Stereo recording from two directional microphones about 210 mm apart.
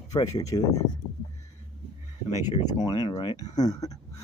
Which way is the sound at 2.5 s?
25° left (ahead or behind).